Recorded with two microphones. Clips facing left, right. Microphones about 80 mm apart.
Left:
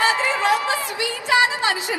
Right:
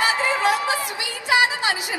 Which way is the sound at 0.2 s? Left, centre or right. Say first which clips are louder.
Left 1 dB; right.